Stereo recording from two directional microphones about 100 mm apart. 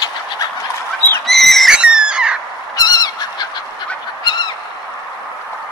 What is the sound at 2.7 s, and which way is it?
Goose, 40° left (ahead or behind).